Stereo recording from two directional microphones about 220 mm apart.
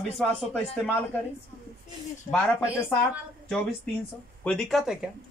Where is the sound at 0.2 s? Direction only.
Centre (ahead or behind).